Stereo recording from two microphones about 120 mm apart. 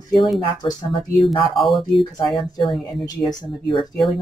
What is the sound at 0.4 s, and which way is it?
Speech, 40° left (ahead or behind).